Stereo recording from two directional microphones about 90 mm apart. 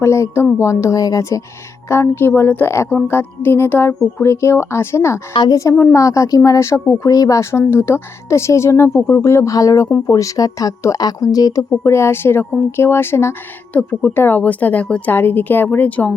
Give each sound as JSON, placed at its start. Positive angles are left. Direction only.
{"t": 0.0, "sound": "speech", "side_deg": 30}
{"t": 7.6, "sound": "speech", "side_deg": 25}
{"t": 11.8, "sound": "a woman's voice", "side_deg": 30}